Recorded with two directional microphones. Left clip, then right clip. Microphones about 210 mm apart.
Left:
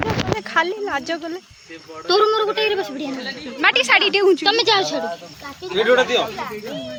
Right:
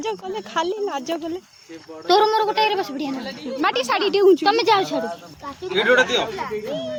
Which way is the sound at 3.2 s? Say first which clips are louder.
Left 5 dB; 25° right (ahead or behind).